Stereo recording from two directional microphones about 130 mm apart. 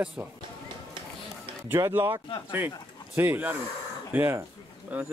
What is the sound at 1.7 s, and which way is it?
Speech, 20° right (ahead or behind).